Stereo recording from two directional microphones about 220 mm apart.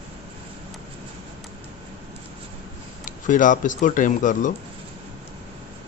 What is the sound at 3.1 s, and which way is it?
A man's voice, 35° left (ahead or behind).